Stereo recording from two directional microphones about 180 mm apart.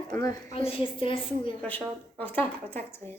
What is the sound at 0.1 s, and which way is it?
Speech, 15° left (ahead or behind).